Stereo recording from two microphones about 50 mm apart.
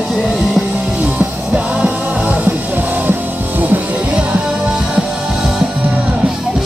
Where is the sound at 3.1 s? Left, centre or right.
Right.